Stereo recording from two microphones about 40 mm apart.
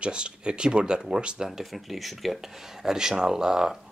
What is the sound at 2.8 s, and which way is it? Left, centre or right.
Speech, centre.